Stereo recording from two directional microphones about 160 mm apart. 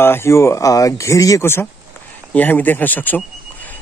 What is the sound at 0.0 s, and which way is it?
Speech, 15° left (ahead or behind).